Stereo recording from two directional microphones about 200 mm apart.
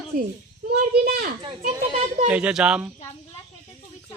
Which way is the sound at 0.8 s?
50° right (ahead or behind).